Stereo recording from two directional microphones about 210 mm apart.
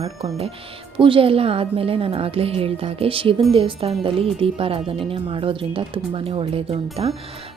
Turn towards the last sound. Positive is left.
turn(degrees=-25)  # may be behind; listen again after turning